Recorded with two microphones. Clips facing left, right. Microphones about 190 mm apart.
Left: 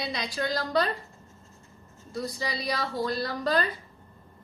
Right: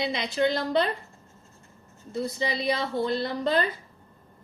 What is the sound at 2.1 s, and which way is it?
A woman's voice, 25° right (ahead or behind).